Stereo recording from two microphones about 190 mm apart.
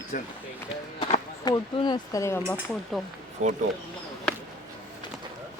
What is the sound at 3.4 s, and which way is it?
Speech, 35° right (ahead or behind).